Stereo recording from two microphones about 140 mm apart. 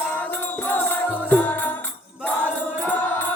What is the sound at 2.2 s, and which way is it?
Chant, 15° left (ahead or behind).